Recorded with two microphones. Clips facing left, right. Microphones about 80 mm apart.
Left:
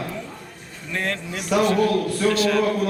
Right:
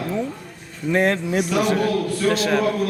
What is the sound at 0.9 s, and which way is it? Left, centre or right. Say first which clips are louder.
Speech: right 8 dB; right.